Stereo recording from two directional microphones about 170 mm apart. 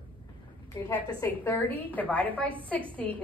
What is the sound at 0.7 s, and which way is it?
Speech, 20° left (ahead or behind).